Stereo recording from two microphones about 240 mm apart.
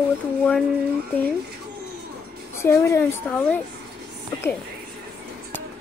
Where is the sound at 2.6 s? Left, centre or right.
Centre.